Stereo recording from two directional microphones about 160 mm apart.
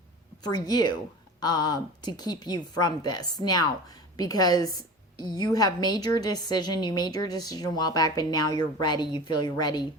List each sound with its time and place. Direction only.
0.4 s a woman's voice: 25° left (ahead or behind)